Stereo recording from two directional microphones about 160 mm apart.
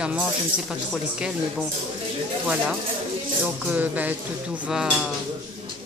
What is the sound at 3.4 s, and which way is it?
Speech, 10° right (ahead or behind).